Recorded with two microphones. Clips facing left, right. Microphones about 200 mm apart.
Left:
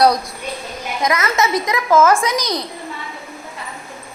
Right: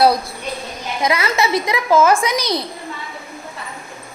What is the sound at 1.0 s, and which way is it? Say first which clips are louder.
Speech: even; 30° right (ahead or behind).